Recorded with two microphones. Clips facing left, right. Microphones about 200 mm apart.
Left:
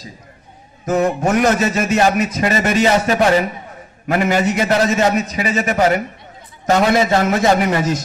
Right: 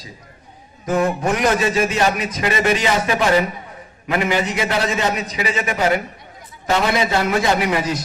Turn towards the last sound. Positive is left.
turn(degrees=45)  # may be behind; listen again after turning